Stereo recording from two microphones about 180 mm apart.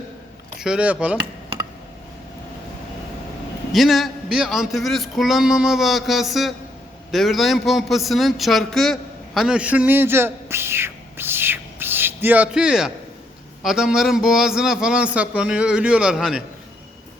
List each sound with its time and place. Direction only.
0.6 s a man's voice: 5° right (ahead or behind)
3.7 s a man's voice: centre (ahead or behind)